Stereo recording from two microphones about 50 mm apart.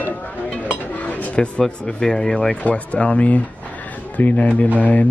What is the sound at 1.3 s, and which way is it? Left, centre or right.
Speech, left.